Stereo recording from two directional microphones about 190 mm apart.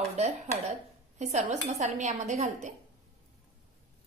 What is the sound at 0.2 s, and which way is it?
A woman's voice, 35° right (ahead or behind).